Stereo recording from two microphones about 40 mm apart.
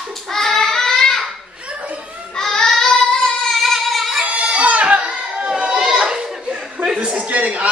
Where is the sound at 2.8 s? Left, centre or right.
Centre.